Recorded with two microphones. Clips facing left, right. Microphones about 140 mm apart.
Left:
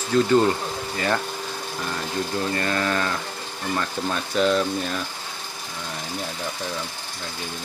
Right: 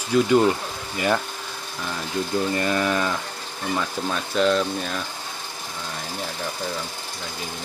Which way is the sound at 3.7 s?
Centre (ahead or behind).